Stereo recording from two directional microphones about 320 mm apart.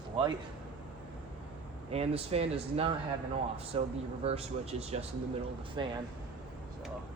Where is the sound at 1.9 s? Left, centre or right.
Centre.